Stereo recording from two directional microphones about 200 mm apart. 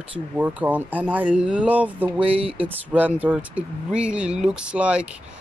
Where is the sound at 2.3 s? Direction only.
30° right (ahead or behind).